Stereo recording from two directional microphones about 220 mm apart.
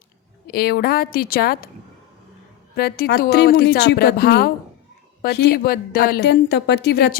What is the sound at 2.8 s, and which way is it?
A woman's voice, 45° left (ahead or behind).